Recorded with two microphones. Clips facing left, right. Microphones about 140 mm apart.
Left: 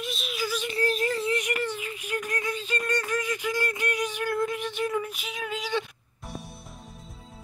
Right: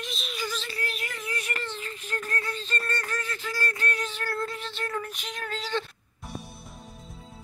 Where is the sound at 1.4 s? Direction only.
15° left (ahead or behind).